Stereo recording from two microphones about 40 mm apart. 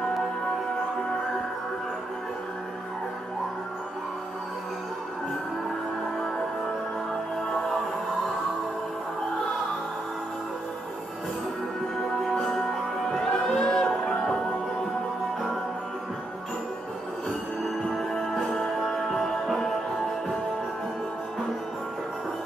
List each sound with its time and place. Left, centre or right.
12.4 s music: centre
13.2 s music: centre
17.8 s music: centre